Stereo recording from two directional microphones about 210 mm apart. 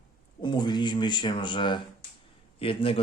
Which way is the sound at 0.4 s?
20° left (ahead or behind).